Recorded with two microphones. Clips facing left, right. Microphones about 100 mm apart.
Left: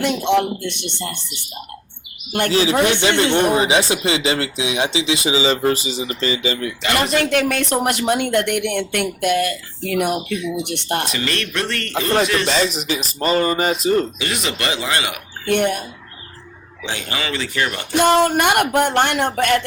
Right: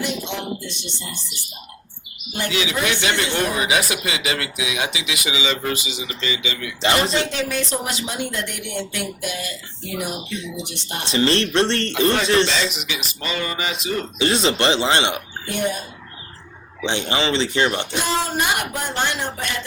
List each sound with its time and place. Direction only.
0.0 s speech: 60° left (ahead or behind)
2.5 s speech: 35° left (ahead or behind)
7.0 s speech: 30° right (ahead or behind)
7.3 s speech: 60° left (ahead or behind)
11.1 s speech: 30° right (ahead or behind)
12.5 s speech: 35° left (ahead or behind)
14.2 s speech: 30° right (ahead or behind)
15.4 s speech: 65° left (ahead or behind)
16.8 s speech: 25° right (ahead or behind)
17.9 s speech: 60° left (ahead or behind)